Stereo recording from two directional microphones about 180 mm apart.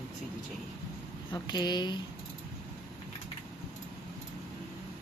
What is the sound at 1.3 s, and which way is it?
Speech, 25° left (ahead or behind).